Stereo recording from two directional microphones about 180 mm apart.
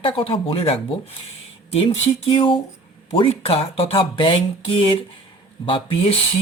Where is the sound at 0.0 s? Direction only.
30° left (ahead or behind).